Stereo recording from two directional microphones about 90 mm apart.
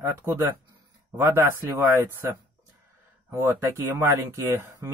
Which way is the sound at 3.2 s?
25° right (ahead or behind).